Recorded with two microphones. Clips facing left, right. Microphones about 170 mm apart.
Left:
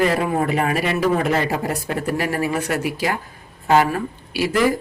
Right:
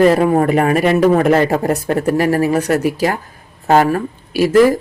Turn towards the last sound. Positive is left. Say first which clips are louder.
# right 8 dB
turn(degrees=-45)  # may be behind; listen again after turning